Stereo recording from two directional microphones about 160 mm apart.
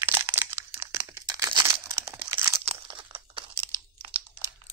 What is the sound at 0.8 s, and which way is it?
Crumpling, 15° right (ahead or behind).